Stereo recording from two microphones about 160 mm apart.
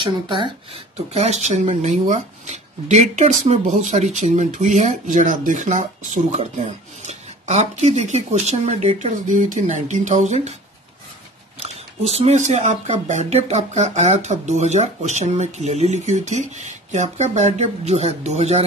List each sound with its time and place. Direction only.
0.0 s speech: 30° right (ahead or behind)
0.9 s speech: 40° right (ahead or behind)
11.6 s speech: 40° right (ahead or behind)